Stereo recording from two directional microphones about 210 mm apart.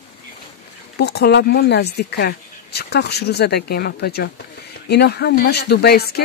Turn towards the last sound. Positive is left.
turn(degrees=50)  # may be behind; listen again after turning